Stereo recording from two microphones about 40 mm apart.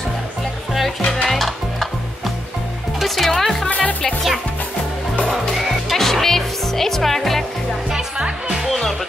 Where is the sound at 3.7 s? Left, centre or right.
Left.